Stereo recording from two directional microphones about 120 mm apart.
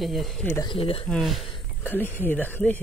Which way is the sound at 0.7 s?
50° left (ahead or behind).